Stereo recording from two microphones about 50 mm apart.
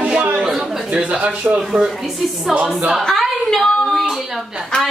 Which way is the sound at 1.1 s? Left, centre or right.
Right.